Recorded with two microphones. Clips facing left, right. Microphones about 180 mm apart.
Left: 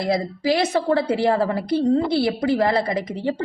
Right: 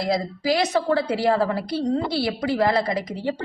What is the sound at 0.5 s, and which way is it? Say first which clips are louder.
A woman's voice: left 1 dB; 30° left (ahead or behind).